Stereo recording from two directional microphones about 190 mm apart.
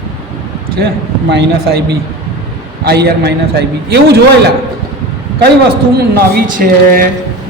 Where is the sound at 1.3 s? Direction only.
65° right (ahead or behind).